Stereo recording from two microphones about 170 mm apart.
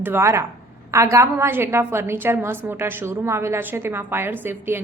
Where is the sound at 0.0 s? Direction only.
15° right (ahead or behind).